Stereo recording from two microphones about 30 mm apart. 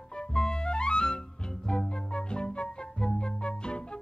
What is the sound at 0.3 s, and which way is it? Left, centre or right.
Music, left.